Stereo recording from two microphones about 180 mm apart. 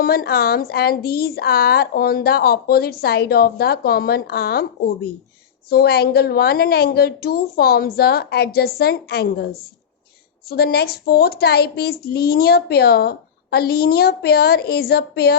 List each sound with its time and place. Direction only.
0.0 s a woman's voice: 55° left (ahead or behind)
5.7 s a woman's voice: 60° left (ahead or behind)